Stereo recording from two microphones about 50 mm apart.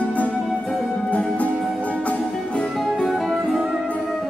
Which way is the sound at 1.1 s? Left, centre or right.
Left.